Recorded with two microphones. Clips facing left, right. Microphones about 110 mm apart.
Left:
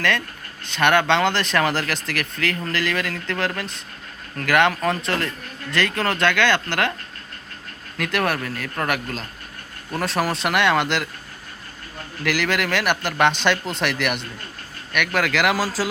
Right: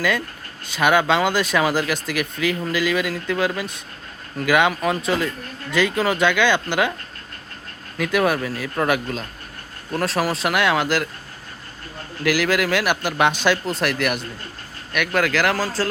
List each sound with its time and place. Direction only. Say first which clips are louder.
0.7 s speech: even; 5° right (ahead or behind)
7.9 s speech: right 3 dB; 5° right (ahead or behind)
12.2 s speech: right 3 dB; 5° right (ahead or behind)